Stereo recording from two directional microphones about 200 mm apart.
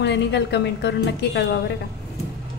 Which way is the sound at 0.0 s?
60° left (ahead or behind).